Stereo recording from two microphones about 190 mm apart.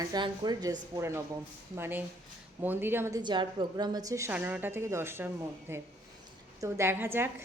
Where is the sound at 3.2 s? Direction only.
25° right (ahead or behind).